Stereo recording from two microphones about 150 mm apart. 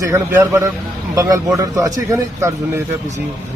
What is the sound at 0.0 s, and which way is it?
A man's voice, 20° right (ahead or behind).